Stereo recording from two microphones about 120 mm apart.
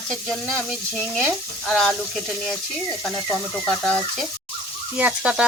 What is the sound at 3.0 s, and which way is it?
Frying, centre (ahead or behind).